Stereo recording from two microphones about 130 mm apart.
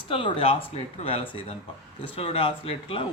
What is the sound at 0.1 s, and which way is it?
Speech, 40° left (ahead or behind).